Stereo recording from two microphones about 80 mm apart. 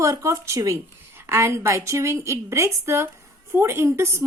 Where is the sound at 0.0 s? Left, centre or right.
Right.